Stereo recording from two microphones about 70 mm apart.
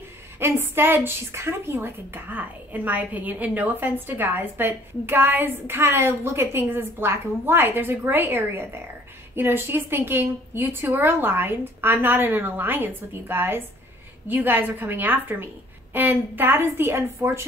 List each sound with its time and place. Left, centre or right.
0.4 s a woman's voice: right